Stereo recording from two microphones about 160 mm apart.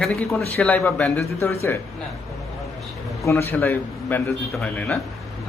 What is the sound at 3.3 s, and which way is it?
A man's voice, 15° left (ahead or behind).